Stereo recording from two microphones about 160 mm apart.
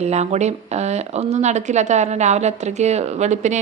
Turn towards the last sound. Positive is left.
turn(degrees=-45)  # may be behind; listen again after turning